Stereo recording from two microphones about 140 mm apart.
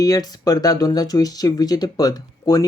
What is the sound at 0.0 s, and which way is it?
Speech, 25° left (ahead or behind).